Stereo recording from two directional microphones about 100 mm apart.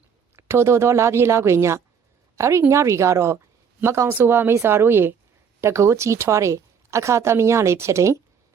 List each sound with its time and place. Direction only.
0.3 s a woman's voice: 25° right (ahead or behind)